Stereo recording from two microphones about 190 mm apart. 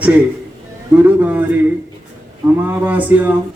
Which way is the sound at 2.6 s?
10° right (ahead or behind).